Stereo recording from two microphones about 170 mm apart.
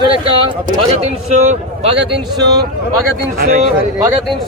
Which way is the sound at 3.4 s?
65° right (ahead or behind).